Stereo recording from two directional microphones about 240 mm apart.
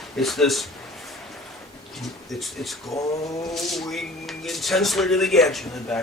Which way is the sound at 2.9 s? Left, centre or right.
Centre.